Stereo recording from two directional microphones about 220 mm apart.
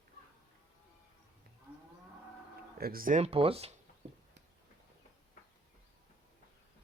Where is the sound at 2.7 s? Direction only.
40° right (ahead or behind); by 3.7 s 25° right (ahead or behind).